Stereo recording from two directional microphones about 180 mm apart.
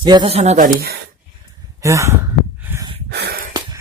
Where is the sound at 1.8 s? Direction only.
15° right (ahead or behind).